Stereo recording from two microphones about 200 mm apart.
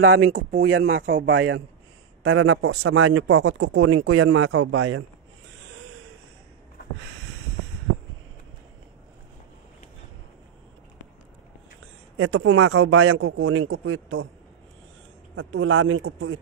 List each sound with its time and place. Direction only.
0.0 s a man's voice: 85° right
2.2 s speech: 90° right
11.8 s speech: 90° right
15.3 s speech: 90° right